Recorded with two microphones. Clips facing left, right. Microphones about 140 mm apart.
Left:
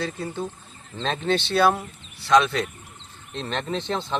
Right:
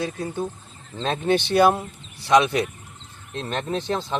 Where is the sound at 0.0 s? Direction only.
10° right (ahead or behind).